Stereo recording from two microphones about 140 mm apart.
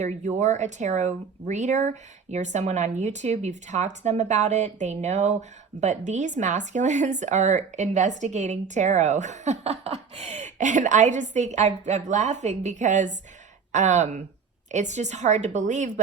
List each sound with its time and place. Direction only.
0.0 s speech: 55° right (ahead or behind)